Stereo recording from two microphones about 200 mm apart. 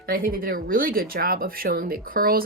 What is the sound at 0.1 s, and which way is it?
A woman's voice, 45° right (ahead or behind).